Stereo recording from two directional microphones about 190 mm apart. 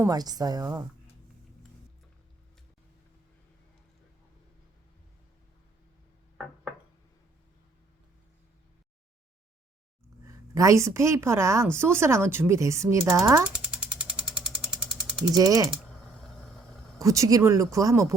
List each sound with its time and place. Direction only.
0.0 s a woman's voice: 20° right (ahead or behind)
10.5 s speech: 15° right (ahead or behind)
13.1 s a sound: 10° right (ahead or behind)
15.3 s a woman's voice: 20° right (ahead or behind)
17.0 s speech: 15° right (ahead or behind)